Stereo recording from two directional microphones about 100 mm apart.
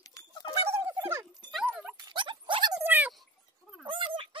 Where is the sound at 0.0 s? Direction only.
40° left (ahead or behind).